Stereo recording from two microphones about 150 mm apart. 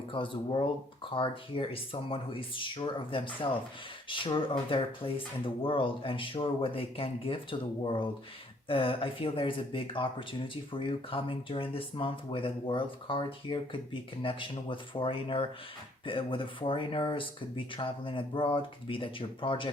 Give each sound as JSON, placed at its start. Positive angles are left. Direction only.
{"t": 0.1, "sound": "speech", "side_deg": 35}
{"t": 8.7, "sound": "speech", "side_deg": 35}